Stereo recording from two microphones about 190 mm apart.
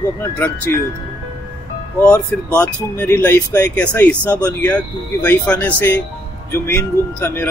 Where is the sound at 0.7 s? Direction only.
15° left (ahead or behind).